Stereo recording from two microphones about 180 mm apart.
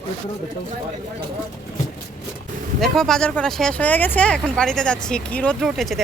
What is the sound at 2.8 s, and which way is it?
Speech, centre (ahead or behind).